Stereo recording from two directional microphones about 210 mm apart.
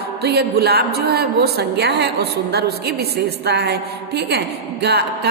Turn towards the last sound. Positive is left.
turn(degrees=-50)  # may be behind; listen again after turning